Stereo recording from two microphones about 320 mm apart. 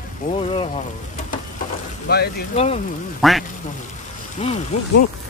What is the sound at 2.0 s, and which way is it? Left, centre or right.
Speech, left.